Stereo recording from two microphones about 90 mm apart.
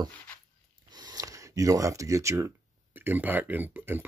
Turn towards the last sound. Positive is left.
turn(degrees=-20)  # may be behind; listen again after turning